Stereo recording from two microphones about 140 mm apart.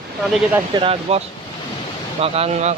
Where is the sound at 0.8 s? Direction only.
45° right (ahead or behind).